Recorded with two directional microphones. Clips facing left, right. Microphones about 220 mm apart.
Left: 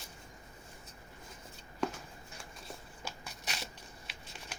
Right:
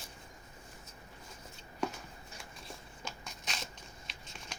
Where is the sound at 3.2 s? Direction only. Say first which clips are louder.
Even; 10° left (ahead or behind).